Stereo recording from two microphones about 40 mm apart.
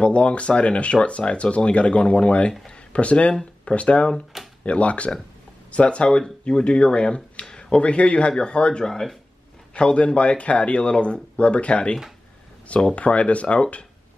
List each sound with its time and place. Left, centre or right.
0.0 s a man's voice: left